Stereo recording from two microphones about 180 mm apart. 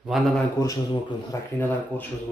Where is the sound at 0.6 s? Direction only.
15° left (ahead or behind).